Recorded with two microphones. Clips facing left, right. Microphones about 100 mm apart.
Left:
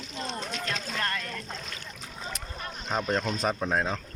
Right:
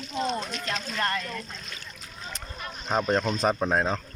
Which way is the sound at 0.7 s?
20° right (ahead or behind).